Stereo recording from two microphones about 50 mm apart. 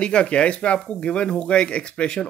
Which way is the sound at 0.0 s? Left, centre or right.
Left.